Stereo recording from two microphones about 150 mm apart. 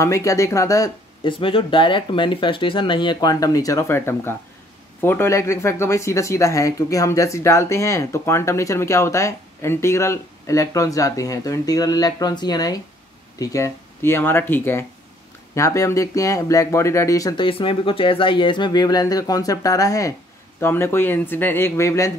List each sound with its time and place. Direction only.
0.0 s speech: 20° left (ahead or behind)
1.2 s speech: 35° left (ahead or behind)
17.5 s speech: 35° left (ahead or behind); by 22.1 s 20° left (ahead or behind)